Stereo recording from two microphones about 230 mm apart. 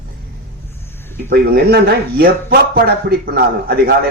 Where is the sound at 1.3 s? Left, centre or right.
Right.